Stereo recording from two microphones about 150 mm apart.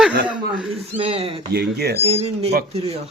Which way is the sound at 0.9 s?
40° right (ahead or behind).